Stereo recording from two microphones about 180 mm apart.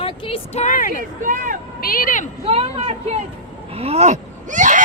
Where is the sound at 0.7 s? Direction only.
50° left (ahead or behind).